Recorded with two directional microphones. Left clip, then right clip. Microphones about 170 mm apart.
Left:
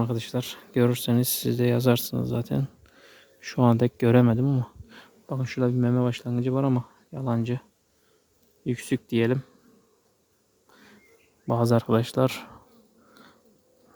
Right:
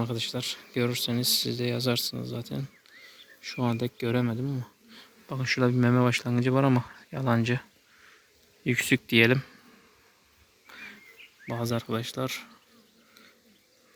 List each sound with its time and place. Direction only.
0.0 s speech: 55° left (ahead or behind)
5.2 s speech: 30° left (ahead or behind)
5.7 s speech: 5° left (ahead or behind)
10.7 s bird: 10° left (ahead or behind)
11.4 s speech: 55° left (ahead or behind)